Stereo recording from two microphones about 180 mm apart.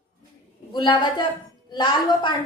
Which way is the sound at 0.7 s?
25° left (ahead or behind).